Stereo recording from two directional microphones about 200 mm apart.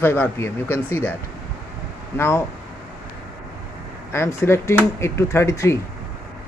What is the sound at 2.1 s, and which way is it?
Speech, 10° left (ahead or behind).